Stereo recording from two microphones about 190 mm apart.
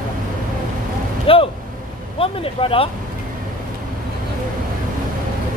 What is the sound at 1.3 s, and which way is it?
Speech, 30° left (ahead or behind).